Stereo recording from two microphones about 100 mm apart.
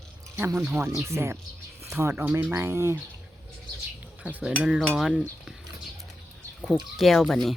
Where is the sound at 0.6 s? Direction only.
15° right (ahead or behind).